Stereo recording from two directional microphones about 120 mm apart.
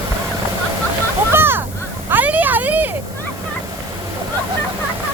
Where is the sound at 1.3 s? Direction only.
20° right (ahead or behind).